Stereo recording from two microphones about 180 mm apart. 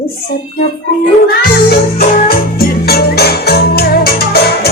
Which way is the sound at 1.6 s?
55° left (ahead or behind).